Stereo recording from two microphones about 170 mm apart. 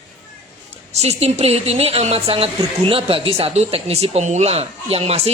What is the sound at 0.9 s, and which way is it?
Speech, 40° right (ahead or behind).